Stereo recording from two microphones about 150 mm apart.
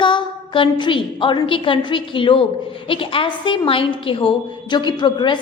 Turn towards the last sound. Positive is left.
turn(degrees=30)  # may be behind; listen again after turning